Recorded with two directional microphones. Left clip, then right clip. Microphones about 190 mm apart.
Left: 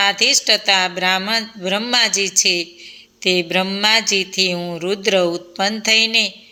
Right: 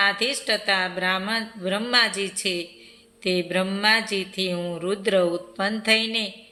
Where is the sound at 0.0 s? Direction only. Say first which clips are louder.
Left 7 dB; 25° left (ahead or behind).